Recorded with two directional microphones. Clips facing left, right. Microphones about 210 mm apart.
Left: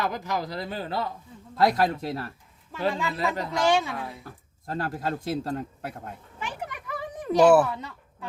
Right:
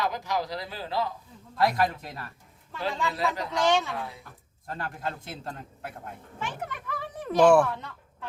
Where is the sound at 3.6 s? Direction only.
10° left (ahead or behind).